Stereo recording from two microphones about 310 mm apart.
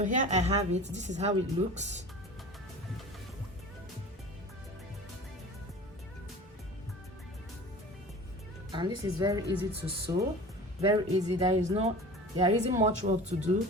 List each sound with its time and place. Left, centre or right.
0.0 s speech: right
8.7 s speech: centre